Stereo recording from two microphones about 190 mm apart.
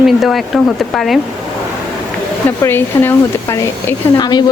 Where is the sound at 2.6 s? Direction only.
10° left (ahead or behind).